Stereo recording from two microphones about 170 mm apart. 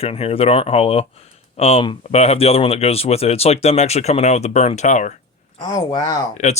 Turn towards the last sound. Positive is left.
turn(degrees=25)  # may be behind; listen again after turning